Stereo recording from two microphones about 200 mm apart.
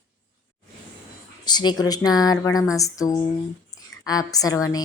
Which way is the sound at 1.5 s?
20° left (ahead or behind).